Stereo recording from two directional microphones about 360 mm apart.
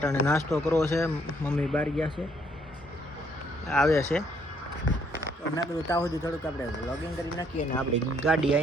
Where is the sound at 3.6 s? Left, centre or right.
Centre.